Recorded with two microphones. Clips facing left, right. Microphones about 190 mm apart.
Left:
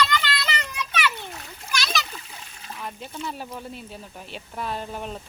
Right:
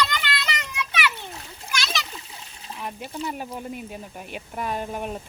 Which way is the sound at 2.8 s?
10° right (ahead or behind).